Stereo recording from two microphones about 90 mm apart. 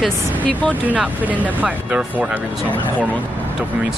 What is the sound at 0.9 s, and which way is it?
Speech, 20° right (ahead or behind).